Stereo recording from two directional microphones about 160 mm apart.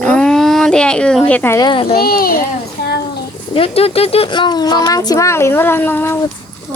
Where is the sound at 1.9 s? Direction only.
70° left (ahead or behind).